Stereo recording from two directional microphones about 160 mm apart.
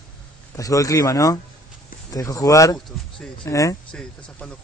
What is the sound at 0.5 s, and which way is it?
Speech, 20° left (ahead or behind).